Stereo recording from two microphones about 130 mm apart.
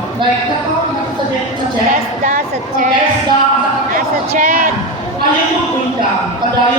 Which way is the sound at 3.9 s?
85° right.